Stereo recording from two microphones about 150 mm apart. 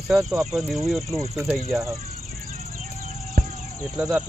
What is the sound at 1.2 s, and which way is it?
Speech, 15° right (ahead or behind).